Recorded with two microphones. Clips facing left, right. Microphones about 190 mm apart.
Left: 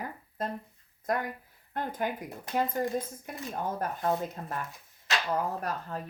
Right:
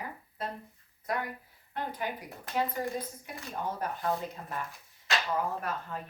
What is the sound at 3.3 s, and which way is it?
Speech, 50° left (ahead or behind).